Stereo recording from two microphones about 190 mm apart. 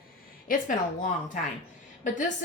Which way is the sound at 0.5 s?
45° left (ahead or behind).